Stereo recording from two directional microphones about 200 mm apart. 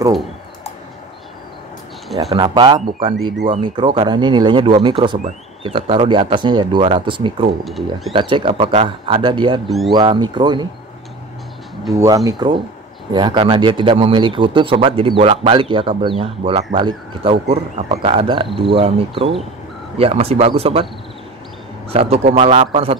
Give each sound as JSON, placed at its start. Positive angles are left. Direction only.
{"t": 2.3, "sound": "speech", "side_deg": -20}
{"t": 7.6, "sound": "speech", "side_deg": 0}
{"t": 8.1, "sound": "speech", "side_deg": -25}
{"t": 9.7, "sound": "speech", "side_deg": 0}
{"t": 9.9, "sound": "speech", "side_deg": -25}
{"t": 12.3, "sound": "speech", "side_deg": -25}
{"t": 21.9, "sound": "speech", "side_deg": -30}